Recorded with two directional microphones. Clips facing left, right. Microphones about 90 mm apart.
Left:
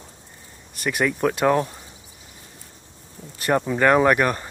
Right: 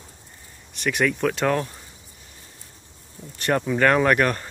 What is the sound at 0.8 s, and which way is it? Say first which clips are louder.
Speech: even; 5° left (ahead or behind).